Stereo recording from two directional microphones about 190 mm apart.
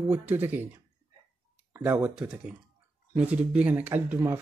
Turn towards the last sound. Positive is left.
turn(degrees=-10)  # may be behind; listen again after turning